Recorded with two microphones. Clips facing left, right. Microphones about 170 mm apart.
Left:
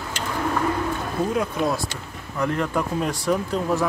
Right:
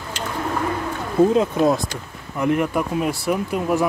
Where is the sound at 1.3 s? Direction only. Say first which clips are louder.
Right 6 dB; 25° right (ahead or behind).